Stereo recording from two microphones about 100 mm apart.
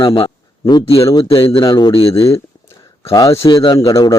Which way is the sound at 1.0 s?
65° left (ahead or behind).